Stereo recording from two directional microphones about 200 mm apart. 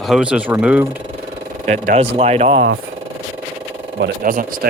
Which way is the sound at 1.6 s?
35° right (ahead or behind).